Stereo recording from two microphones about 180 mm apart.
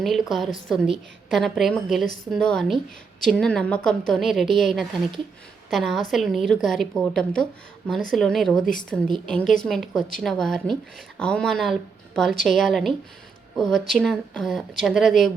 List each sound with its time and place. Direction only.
0.0 s a woman's voice: centre (ahead or behind)
8.6 s speech: 50° left (ahead or behind)
9.2 s a woman's voice: 5° left (ahead or behind)